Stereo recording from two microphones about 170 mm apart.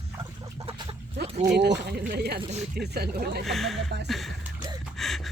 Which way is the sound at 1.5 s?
85° right.